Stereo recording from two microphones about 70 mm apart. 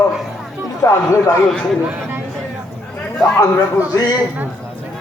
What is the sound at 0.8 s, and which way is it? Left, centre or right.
Speech, left.